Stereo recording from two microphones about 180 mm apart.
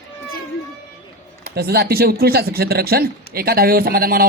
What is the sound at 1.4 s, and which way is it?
Speech, 60° right (ahead or behind).